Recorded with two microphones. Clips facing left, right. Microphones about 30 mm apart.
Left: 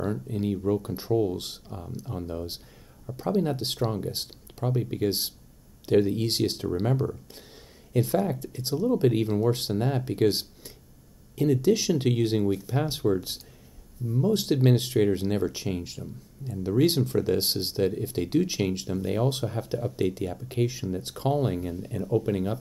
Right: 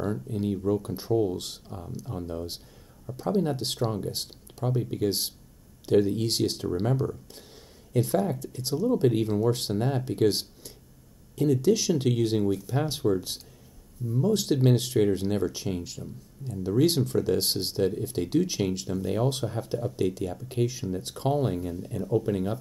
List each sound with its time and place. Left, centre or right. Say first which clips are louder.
0.0 s speech: even; centre
4.9 s speech: even; left
8.5 s speech: even; centre
12.4 s speech: even; left
12.7 s speech: even; centre